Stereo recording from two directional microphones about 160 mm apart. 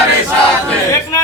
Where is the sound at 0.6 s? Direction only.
20° left (ahead or behind).